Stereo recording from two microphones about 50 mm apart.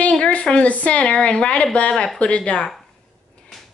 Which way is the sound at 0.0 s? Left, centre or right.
Left.